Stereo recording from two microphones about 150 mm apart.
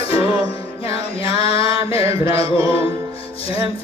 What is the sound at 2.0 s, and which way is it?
Music, 20° right (ahead or behind).